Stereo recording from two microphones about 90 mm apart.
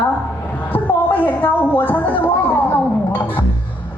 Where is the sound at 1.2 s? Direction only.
20° left (ahead or behind).